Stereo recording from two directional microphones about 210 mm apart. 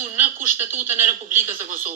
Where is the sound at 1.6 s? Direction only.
40° right (ahead or behind).